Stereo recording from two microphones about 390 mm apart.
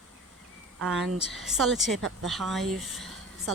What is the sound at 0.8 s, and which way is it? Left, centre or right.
Speech, centre.